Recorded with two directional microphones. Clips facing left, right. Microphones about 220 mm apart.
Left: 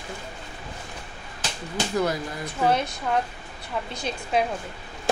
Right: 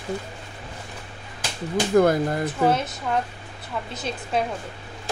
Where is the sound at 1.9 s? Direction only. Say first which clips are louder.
Right 9 dB; 55° right (ahead or behind).